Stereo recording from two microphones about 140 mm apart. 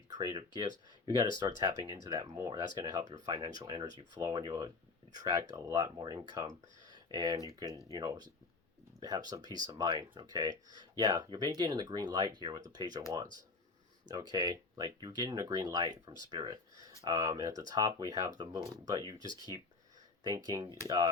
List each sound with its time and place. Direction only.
0.2 s speech: 30° right (ahead or behind)
6.8 s a sound: 30° right (ahead or behind)
7.3 s speech: 25° left (ahead or behind)
7.9 s speech: 30° right (ahead or behind)
14.1 s speech: 30° right (ahead or behind)